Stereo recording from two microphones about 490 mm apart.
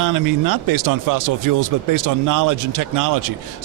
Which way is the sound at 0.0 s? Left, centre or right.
Right.